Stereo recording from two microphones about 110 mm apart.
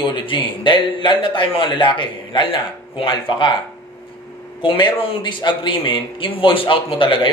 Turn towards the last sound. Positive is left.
turn(degrees=50)  # may be behind; listen again after turning